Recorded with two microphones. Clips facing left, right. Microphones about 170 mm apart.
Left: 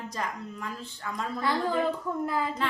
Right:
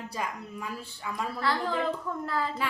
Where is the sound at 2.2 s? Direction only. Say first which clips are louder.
Right 1 dB; 15° left (ahead or behind).